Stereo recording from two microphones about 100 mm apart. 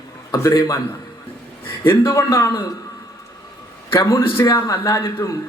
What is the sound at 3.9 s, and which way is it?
A man's voice, 30° left (ahead or behind).